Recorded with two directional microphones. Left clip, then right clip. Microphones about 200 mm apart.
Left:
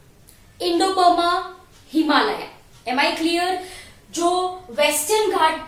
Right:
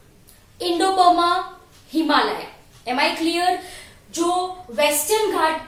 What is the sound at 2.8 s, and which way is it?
Speech, 15° left (ahead or behind).